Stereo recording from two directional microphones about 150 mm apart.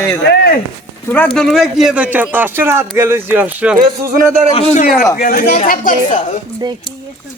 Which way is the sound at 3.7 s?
65° right (ahead or behind).